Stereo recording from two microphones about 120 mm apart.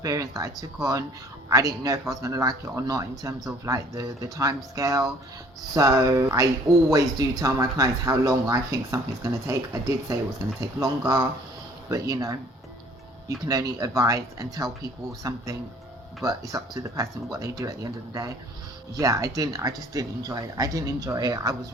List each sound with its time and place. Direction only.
0.0 s speech: 30° right (ahead or behind)